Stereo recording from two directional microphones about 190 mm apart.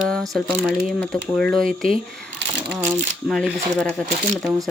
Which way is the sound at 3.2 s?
Centre (ahead or behind).